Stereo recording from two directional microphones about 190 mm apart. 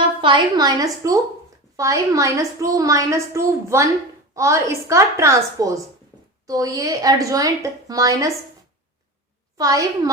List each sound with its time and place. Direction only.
0.2 s a woman's voice: 25° right (ahead or behind)
9.6 s a woman's voice: 20° right (ahead or behind)